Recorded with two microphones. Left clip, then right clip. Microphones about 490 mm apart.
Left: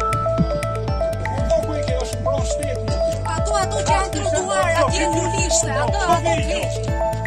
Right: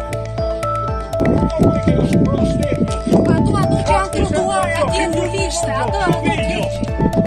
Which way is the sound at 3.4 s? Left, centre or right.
Left.